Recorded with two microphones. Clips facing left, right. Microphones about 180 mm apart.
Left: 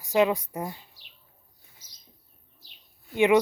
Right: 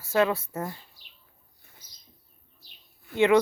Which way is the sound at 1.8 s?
90° left.